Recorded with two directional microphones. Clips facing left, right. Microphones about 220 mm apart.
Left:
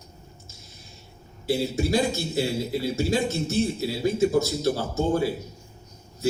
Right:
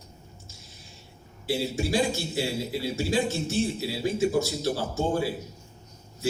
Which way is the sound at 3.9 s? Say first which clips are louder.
Left 4 dB; 45° left (ahead or behind).